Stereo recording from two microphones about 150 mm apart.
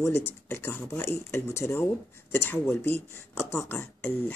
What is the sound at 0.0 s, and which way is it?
Speech, 15° left (ahead or behind).